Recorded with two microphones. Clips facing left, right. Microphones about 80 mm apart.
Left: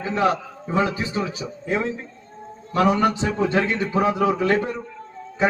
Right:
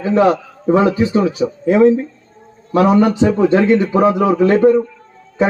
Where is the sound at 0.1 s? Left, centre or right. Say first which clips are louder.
Right 8 dB; right.